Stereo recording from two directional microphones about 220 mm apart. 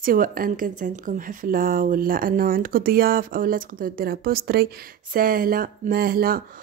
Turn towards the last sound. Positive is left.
turn(degrees=-40)  # may be behind; listen again after turning